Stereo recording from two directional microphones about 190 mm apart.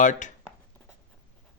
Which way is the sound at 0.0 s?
40° left (ahead or behind).